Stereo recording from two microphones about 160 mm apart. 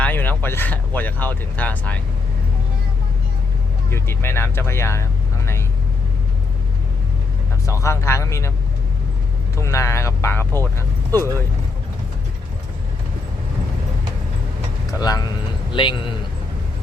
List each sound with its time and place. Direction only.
0.0 s speech: 10° left (ahead or behind)
3.8 s speech: 15° left (ahead or behind)
7.7 s speech: 20° left (ahead or behind)
9.6 s speech: 20° left (ahead or behind)
14.9 s speech: 25° left (ahead or behind)